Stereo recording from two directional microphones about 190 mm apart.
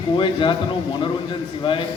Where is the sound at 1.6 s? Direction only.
25° left (ahead or behind).